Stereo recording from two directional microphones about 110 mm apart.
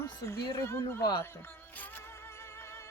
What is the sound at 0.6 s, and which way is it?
Speech, 25° left (ahead or behind).